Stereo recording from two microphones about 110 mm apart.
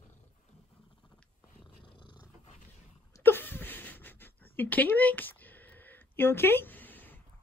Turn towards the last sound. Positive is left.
turn(degrees=15)  # may be behind; listen again after turning